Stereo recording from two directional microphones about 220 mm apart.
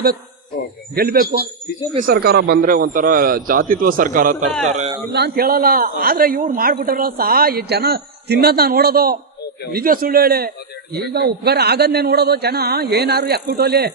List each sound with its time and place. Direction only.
0.9 s a man's voice: 45° right (ahead or behind)
5.1 s speech: 45° right (ahead or behind)